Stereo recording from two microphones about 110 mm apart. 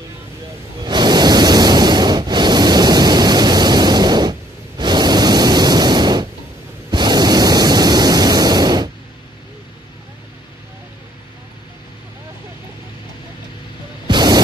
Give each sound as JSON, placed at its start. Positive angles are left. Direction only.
{"t": 0.8, "sound": "waves", "side_deg": -40}
{"t": 6.9, "sound": "pink noise", "side_deg": -40}
{"t": 14.0, "sound": "music", "side_deg": -40}